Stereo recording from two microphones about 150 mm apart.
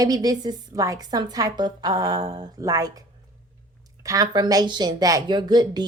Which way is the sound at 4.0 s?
25° right (ahead or behind).